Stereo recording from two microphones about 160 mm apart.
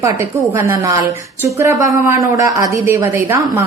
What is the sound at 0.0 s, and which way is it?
A woman's voice, 20° right (ahead or behind).